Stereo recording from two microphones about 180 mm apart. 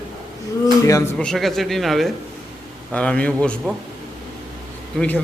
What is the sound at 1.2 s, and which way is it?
A man's voice, centre (ahead or behind).